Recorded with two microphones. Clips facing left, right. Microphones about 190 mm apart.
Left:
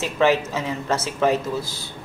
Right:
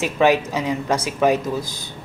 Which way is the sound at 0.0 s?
15° right (ahead or behind).